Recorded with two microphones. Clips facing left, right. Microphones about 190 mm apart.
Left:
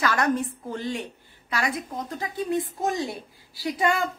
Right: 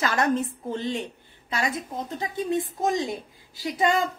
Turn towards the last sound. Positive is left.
turn(degrees=-20)  # may be behind; listen again after turning